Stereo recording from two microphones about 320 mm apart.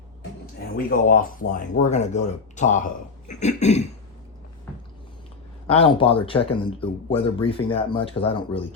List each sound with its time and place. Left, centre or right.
0.9 s speech: left
5.6 s speech: centre